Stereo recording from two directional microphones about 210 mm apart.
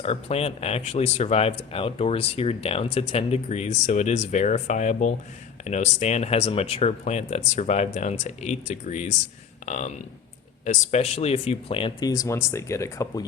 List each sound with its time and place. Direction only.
0.0 s speech: 30° left (ahead or behind); by 13.2 s 15° left (ahead or behind)